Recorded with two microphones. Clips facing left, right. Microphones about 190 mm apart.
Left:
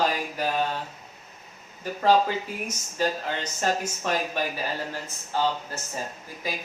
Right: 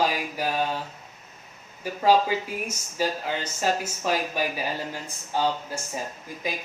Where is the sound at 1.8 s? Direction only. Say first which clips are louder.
Right 1 dB; 10° right (ahead or behind).